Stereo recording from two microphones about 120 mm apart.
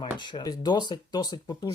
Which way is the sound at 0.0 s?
40° left (ahead or behind).